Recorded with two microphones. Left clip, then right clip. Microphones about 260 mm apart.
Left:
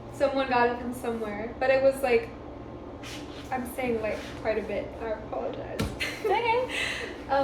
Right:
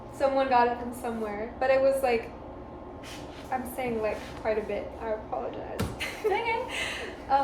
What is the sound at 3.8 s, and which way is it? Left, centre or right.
A woman's voice, centre.